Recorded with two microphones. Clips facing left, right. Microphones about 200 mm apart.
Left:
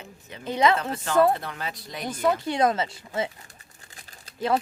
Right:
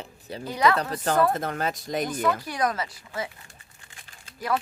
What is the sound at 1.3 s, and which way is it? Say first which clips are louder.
Speech: right 2 dB; 45° right (ahead or behind).